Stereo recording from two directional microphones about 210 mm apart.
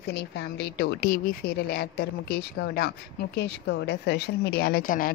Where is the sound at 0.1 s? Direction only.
50° left (ahead or behind).